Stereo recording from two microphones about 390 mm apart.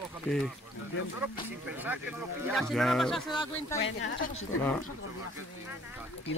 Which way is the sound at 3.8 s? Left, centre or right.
Left.